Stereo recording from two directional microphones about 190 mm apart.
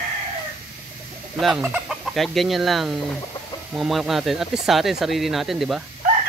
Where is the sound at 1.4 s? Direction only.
Centre (ahead or behind).